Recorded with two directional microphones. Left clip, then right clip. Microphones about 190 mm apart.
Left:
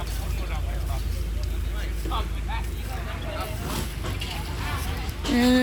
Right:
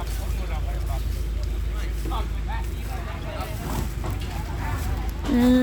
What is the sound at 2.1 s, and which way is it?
Vehicle, 50° right (ahead or behind).